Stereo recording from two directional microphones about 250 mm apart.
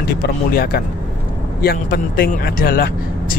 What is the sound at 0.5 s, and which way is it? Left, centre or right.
Speech, left.